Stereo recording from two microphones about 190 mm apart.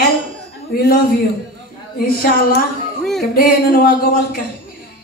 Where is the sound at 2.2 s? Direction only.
55° left (ahead or behind).